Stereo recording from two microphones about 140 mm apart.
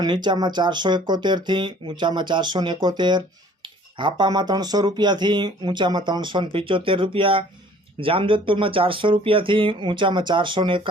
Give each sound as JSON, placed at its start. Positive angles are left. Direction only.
{"t": 0.0, "sound": "speech", "side_deg": -30}